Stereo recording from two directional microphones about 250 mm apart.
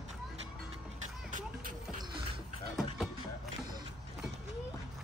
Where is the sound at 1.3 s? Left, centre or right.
Right.